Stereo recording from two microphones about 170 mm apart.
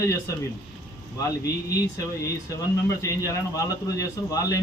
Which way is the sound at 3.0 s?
20° left (ahead or behind).